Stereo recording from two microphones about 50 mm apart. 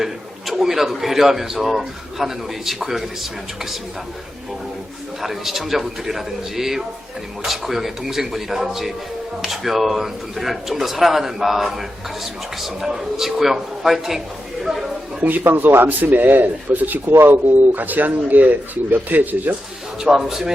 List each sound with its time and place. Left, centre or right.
0.0 s a man's voice: centre
5.2 s speech: centre
14.6 s a sound: centre
15.2 s speech: right
15.5 s speech: right
20.0 s speech: centre